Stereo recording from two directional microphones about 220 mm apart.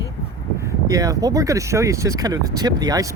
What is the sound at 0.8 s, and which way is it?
Speech, 15° right (ahead or behind).